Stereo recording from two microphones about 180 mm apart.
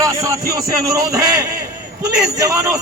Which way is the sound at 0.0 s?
20° right (ahead or behind).